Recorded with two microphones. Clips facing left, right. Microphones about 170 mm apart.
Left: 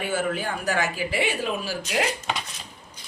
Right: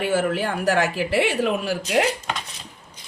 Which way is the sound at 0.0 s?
70° right (ahead or behind).